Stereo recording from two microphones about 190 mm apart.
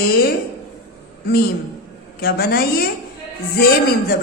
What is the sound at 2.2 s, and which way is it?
Speech, 55° left (ahead or behind).